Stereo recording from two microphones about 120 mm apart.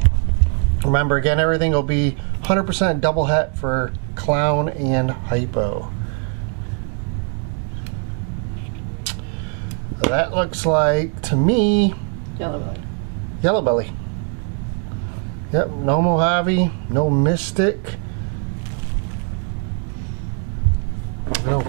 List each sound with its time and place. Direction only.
0.8 s speech: 15° right (ahead or behind)
10.0 s speech: 10° right (ahead or behind)
13.4 s speech: 15° right (ahead or behind)
15.5 s speech: 15° right (ahead or behind)
21.3 s a sound: 15° right (ahead or behind)